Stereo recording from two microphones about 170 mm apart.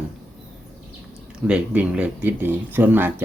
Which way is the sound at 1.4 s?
5° right (ahead or behind).